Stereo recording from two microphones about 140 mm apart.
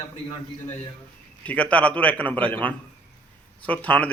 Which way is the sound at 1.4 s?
10° left (ahead or behind).